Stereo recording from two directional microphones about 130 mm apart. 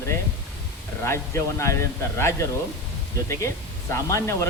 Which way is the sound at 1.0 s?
20° left (ahead or behind).